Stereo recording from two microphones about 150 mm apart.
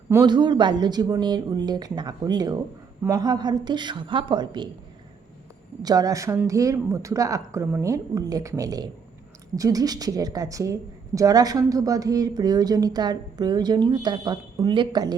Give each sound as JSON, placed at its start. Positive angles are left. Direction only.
{"t": 0.3, "sound": "a woman's voice", "side_deg": -30}
{"t": 5.8, "sound": "a woman's voice", "side_deg": -25}